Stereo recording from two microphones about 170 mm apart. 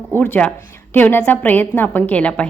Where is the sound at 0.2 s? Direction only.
5° left (ahead or behind).